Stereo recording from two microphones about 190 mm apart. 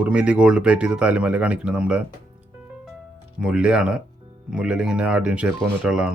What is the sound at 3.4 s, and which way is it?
Speech, 5° right (ahead or behind).